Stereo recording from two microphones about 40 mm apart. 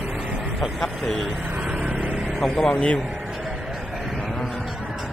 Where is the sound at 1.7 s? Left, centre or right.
Right.